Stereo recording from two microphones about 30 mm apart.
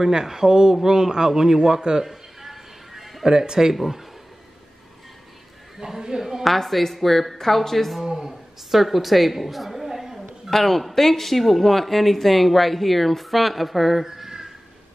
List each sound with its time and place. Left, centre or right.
0.0 s a man's voice: centre
1.8 s a man's voice: right
2.0 s music: centre
3.3 s a man's voice: right
5.8 s a man's voice: right
6.4 s speech: centre
8.0 s a man's voice: centre
8.3 s a woman's voice: centre
9.8 s a sound: centre
10.5 s speech: centre